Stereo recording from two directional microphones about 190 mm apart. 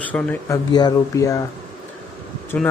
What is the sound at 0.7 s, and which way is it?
Speech, 20° left (ahead or behind).